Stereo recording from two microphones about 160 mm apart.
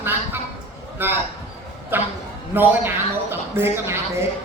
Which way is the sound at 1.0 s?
15° right (ahead or behind).